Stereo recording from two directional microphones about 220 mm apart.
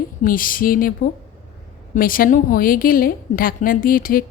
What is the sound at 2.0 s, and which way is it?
Speech, 40° left (ahead or behind).